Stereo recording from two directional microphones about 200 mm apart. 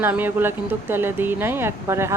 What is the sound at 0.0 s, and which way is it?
Speech, 10° right (ahead or behind).